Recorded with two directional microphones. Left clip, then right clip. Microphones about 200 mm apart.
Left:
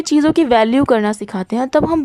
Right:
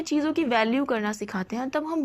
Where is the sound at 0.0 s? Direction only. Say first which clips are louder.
Left 12 dB; 50° left (ahead or behind).